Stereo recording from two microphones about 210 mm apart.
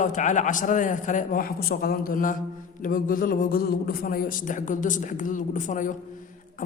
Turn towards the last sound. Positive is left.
turn(degrees=35)  # may be behind; listen again after turning